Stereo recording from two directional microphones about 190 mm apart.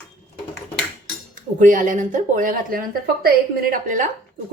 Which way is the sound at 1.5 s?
45° right (ahead or behind).